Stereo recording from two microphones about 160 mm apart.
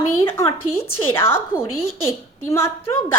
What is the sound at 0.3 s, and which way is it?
A woman's voice, 15° left (ahead or behind).